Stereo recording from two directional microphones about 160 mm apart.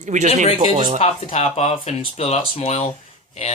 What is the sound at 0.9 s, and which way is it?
Speech, 40° left (ahead or behind).